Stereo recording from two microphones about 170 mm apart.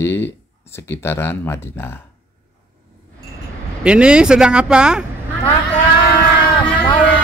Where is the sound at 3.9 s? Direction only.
5° right (ahead or behind).